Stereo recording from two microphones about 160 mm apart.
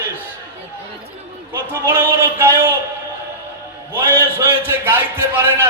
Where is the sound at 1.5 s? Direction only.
15° right (ahead or behind).